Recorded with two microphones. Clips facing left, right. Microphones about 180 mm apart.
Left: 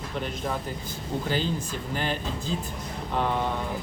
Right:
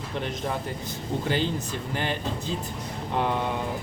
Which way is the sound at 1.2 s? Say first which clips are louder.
Right 2 dB; 60° right (ahead or behind).